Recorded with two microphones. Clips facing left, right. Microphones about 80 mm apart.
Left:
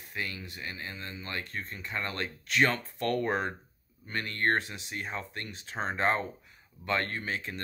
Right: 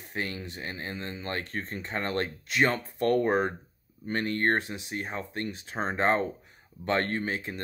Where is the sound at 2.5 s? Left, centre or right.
Right.